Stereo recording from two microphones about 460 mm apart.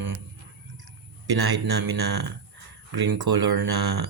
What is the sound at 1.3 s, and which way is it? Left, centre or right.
Speech, right.